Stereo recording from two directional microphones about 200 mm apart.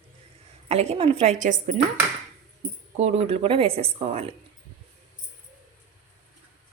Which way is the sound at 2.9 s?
30° right (ahead or behind).